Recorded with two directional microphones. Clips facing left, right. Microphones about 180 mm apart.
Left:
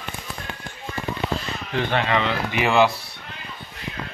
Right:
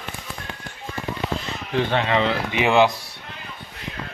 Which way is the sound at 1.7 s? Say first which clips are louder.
Right 2 dB; 20° right (ahead or behind).